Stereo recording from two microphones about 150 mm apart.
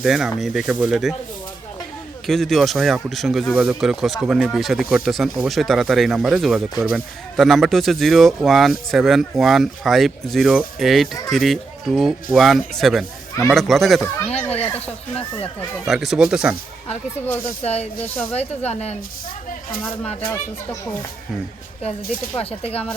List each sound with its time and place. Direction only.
0.0 s speech: centre (ahead or behind)
2.2 s speech: centre (ahead or behind)
15.9 s speech: 5° right (ahead or behind)
17.6 s speech: 45° left (ahead or behind)
22.0 s speech: 70° left (ahead or behind)
22.4 s speech: 40° left (ahead or behind)